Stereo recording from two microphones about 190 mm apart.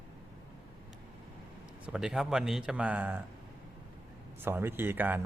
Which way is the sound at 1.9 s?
5° right (ahead or behind).